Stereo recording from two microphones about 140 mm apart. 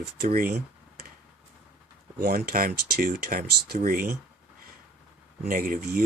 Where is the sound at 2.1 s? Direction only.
90° right.